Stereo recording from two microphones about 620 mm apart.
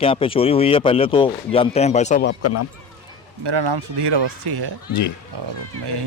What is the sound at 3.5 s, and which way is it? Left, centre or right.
Speech, right.